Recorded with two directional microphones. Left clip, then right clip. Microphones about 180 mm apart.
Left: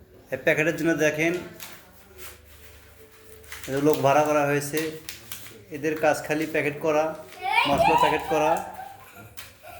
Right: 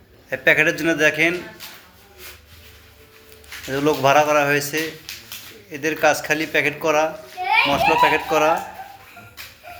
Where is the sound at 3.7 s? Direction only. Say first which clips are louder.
Right 4 dB; 5° right (ahead or behind).